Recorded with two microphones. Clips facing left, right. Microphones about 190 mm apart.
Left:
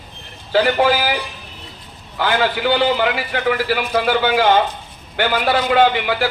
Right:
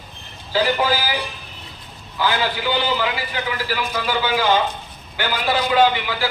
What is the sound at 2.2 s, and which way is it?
A man's voice, 60° left (ahead or behind).